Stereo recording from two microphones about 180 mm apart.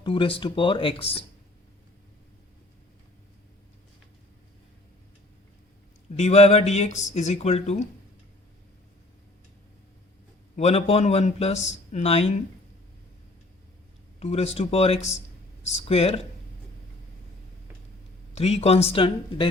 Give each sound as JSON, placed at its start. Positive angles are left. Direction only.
{"t": 0.0, "sound": "speech", "side_deg": 30}
{"t": 6.1, "sound": "speech", "side_deg": 35}
{"t": 10.5, "sound": "speech", "side_deg": 35}
{"t": 14.2, "sound": "speech", "side_deg": 35}
{"t": 18.3, "sound": "speech", "side_deg": 35}